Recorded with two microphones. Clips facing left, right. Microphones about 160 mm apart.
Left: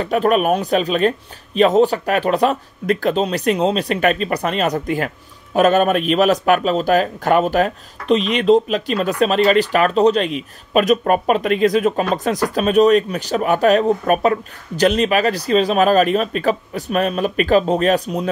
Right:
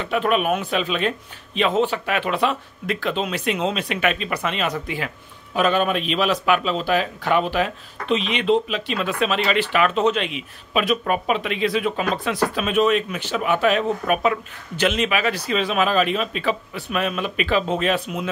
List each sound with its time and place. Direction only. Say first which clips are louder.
0.0 s speech: left 5 dB; 40° left (ahead or behind)